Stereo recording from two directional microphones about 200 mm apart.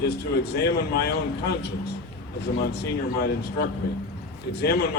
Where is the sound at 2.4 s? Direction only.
55° left (ahead or behind).